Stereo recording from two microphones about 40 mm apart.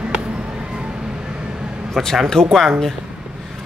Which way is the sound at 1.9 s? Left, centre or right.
Centre.